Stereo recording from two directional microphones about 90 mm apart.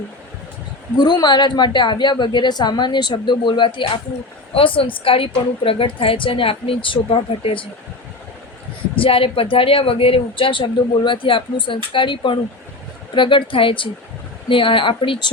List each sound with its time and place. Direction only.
0.9 s a woman's voice: 55° left (ahead or behind)
4.5 s a woman's voice: 85° left
9.0 s a woman's voice: 90° left; by 15.2 s 70° left (ahead or behind)